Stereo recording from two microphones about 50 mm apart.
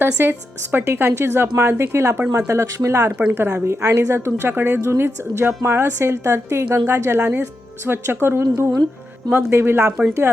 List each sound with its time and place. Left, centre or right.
0.0 s a woman's voice: right
1.0 s a woman's voice: right
2.5 s speech: right
3.5 s a woman's voice: right
4.8 s a woman's voice: right
7.2 s speech: right
7.9 s a woman's voice: right
10.0 s speech: right